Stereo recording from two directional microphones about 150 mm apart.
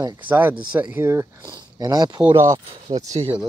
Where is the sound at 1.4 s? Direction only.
25° right (ahead or behind).